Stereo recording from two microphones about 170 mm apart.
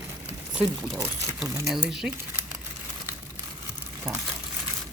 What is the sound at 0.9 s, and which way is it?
Speech, 20° right (ahead or behind).